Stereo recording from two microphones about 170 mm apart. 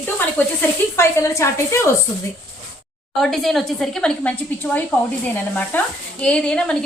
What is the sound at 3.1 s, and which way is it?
A woman's voice, centre (ahead or behind).